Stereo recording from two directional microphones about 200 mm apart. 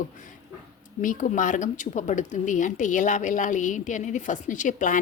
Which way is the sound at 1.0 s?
40° left (ahead or behind).